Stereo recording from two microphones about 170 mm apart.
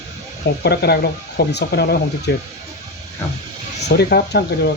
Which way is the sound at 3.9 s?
70° left (ahead or behind).